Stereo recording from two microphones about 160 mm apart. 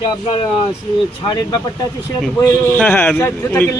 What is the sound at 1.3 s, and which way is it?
Speech, 25° left (ahead or behind).